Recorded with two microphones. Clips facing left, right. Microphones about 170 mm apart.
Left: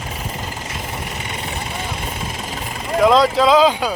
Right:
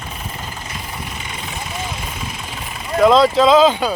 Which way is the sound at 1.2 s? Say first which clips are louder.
Left 3 dB; 65° left (ahead or behind).